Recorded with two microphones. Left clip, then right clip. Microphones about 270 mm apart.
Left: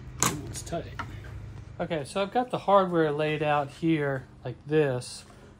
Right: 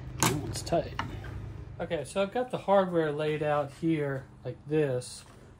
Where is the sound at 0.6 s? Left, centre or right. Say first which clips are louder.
Right 7 dB; centre.